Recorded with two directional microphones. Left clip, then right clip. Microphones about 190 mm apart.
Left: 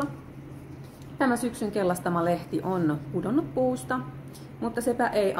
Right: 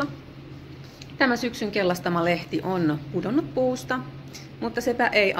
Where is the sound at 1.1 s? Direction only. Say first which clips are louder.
Right 3 dB; 10° right (ahead or behind).